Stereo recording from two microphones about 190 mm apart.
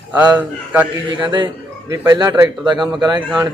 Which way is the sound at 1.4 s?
15° right (ahead or behind).